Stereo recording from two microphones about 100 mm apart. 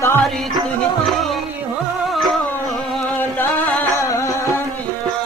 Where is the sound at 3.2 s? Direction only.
20° left (ahead or behind).